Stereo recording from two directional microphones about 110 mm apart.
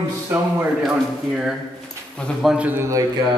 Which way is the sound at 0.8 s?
5° right (ahead or behind).